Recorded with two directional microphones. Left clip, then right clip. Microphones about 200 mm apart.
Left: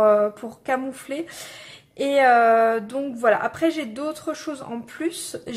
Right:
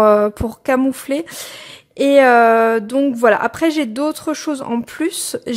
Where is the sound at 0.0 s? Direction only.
50° right (ahead or behind).